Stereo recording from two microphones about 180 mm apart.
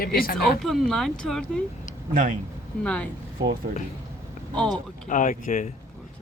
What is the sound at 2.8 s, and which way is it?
Speech, 5° left (ahead or behind).